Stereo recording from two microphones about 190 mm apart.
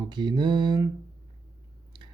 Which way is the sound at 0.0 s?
25° right (ahead or behind).